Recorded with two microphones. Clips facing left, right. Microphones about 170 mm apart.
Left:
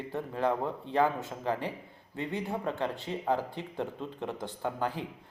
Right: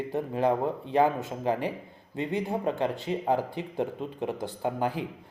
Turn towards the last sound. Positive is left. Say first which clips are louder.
# right 4 dB
turn(degrees=-10)  # may be behind; listen again after turning